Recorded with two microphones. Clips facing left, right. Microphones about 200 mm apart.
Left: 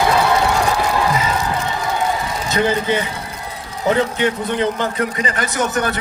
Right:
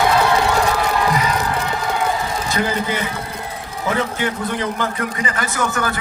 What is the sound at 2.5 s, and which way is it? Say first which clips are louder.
A man's voice: left 5 dB; 25° left (ahead or behind).